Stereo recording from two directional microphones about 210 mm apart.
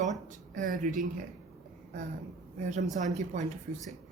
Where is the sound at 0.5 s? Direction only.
40° right (ahead or behind).